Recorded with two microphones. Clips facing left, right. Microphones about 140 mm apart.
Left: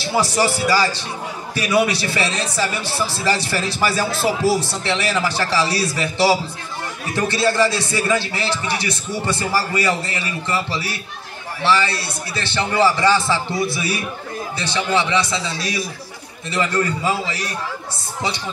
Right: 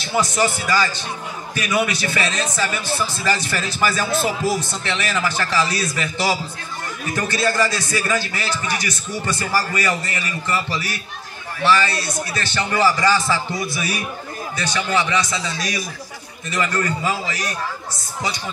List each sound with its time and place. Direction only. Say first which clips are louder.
0.0 s a man's voice: left 1 dB; 30° left (ahead or behind)